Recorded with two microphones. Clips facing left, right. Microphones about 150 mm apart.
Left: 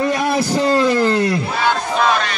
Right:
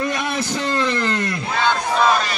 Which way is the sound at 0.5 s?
40° left (ahead or behind).